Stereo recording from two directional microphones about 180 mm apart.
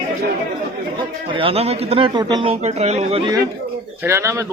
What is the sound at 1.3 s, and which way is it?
A man's voice, 30° right (ahead or behind).